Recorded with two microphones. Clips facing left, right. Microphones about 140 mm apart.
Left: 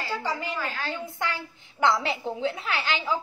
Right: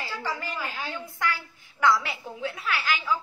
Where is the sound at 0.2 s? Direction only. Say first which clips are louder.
Left 2 dB; 20° left (ahead or behind).